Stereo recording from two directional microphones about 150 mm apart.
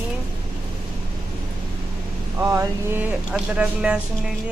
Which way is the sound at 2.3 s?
20° right (ahead or behind).